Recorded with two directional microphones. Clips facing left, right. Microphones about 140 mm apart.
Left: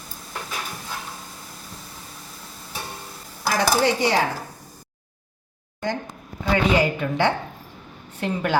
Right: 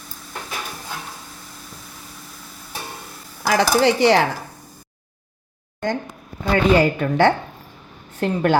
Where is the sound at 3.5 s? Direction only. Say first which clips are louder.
Right 4 dB; 75° right (ahead or behind).